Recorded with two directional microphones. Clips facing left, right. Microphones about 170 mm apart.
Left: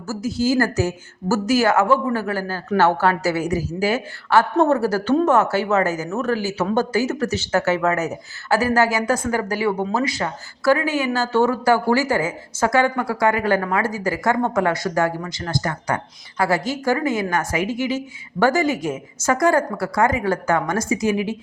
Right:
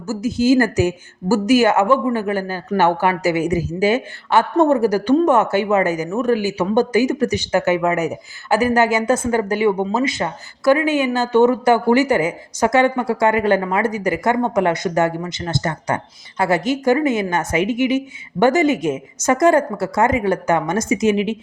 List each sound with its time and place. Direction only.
0.1 s speech: 20° right (ahead or behind)